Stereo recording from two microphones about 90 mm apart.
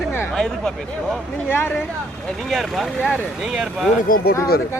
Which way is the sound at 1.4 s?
25° left (ahead or behind).